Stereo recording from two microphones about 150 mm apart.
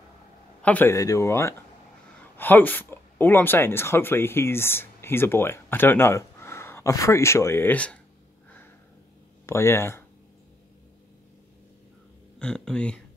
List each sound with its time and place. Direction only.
0.6 s speech: 10° left (ahead or behind)
9.5 s speech: 15° left (ahead or behind)
12.4 s speech: 5° left (ahead or behind)